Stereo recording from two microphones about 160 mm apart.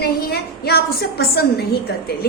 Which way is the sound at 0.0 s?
80° left.